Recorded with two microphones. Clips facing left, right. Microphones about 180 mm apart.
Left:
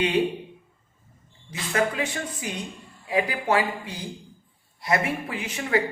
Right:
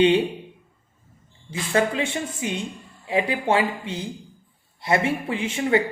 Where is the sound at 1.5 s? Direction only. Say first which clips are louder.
Right 3 dB; 30° right (ahead or behind).